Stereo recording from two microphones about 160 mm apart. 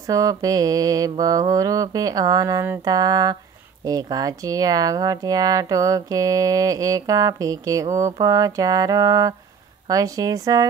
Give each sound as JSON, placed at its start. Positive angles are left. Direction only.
{"t": 0.1, "sound": "speech", "side_deg": -25}